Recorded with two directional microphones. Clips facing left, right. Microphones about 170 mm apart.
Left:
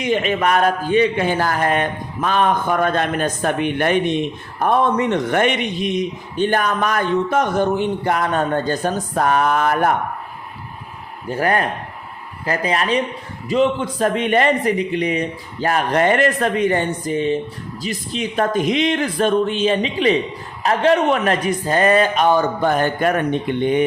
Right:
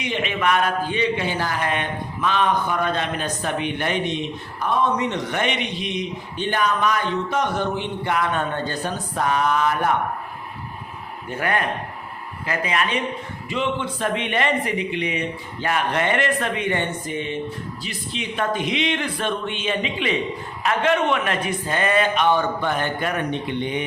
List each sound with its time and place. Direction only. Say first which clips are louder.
0.0 s a man's voice: left 5 dB; 45° left (ahead or behind)
11.3 s speech: left 5 dB; 35° left (ahead or behind)